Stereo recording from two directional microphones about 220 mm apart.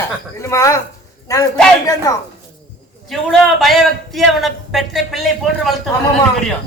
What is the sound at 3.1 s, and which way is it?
A man's voice, centre (ahead or behind).